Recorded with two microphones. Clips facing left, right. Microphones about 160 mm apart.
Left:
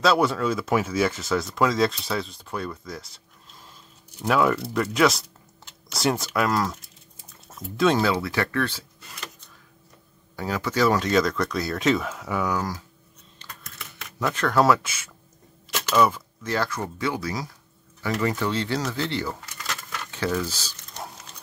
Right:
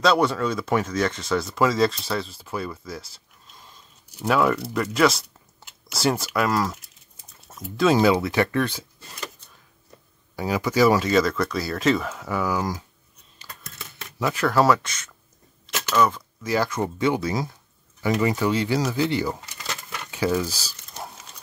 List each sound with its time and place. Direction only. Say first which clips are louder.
0.0 s speech: right 1 dB; centre (ahead or behind)
4.2 s speech: right 1 dB; centre (ahead or behind)
8.0 s speech: right 5 dB; 20° right (ahead or behind)
10.3 s speech: right 3 dB; 10° right (ahead or behind)
12.5 s speech: right 2 dB; 10° right (ahead or behind)
13.4 s typing: even; 10° right (ahead or behind)
14.2 s speech: right 1 dB; 5° right (ahead or behind)
16.4 s speech: right 3 dB; 15° right (ahead or behind)
19.7 s a sound: even; 10° right (ahead or behind)